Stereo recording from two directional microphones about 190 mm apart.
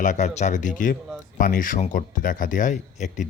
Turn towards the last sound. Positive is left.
turn(degrees=40)  # may be behind; listen again after turning